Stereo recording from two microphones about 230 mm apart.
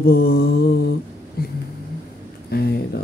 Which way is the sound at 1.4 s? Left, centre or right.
Left.